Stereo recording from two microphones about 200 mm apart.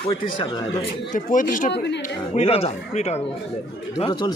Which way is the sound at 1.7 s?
60° left (ahead or behind).